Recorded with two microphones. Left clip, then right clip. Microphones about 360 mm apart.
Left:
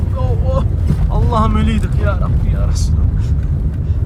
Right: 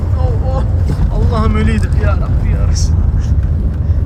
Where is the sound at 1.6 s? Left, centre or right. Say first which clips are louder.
Right 2 dB; left.